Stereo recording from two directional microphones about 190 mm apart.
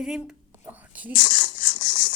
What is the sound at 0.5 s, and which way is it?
Whispering, 10° right (ahead or behind).